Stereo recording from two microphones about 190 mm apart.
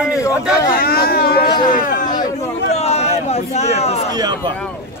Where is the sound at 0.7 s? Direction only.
55° left (ahead or behind).